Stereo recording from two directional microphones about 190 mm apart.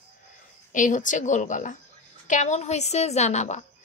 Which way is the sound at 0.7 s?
40° left (ahead or behind).